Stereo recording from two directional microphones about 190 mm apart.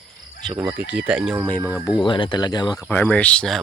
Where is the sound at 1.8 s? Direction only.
25° left (ahead or behind).